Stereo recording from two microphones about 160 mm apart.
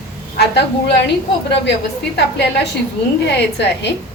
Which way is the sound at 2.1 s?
90° left.